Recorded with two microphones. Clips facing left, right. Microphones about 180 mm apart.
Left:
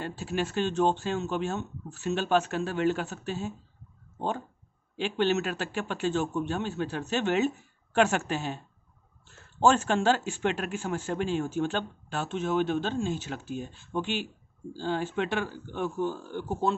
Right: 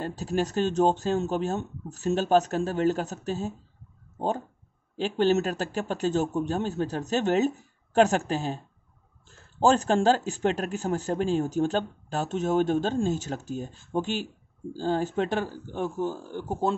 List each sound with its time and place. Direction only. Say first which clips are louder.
0.0 s speech: right 3 dB; 40° right (ahead or behind)
4.9 s speech: right 3 dB; 40° right (ahead or behind)
9.6 s speech: right 2 dB; 35° right (ahead or behind)